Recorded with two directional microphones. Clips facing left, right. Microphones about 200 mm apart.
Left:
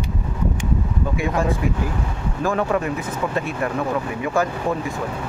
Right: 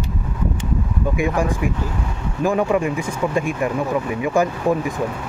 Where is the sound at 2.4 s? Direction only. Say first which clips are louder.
Right 3 dB; 15° right (ahead or behind).